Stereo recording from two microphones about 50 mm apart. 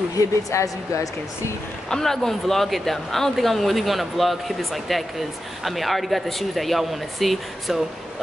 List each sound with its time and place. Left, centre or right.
0.5 s a woman's voice: left
1.9 s speech: centre